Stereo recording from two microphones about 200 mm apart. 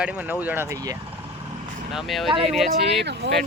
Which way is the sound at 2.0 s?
Centre (ahead or behind).